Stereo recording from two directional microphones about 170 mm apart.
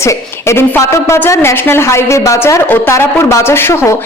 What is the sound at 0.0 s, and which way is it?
A woman's voice, 15° left (ahead or behind).